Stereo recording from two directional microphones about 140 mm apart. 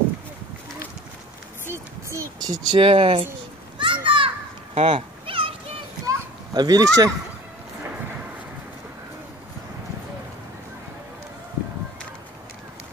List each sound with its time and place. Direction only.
1.7 s speech: 20° right (ahead or behind); by 3.3 s 40° right (ahead or behind)
3.7 s children playing: 35° right (ahead or behind)
4.7 s cat: 40° right (ahead or behind)
6.0 s a sound: 25° right (ahead or behind)